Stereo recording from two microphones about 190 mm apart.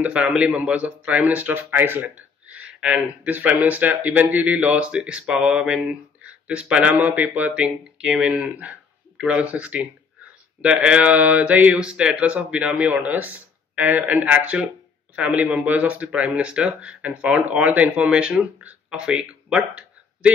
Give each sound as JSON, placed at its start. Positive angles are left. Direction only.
{"t": 0.0, "sound": "a man's voice", "side_deg": -5}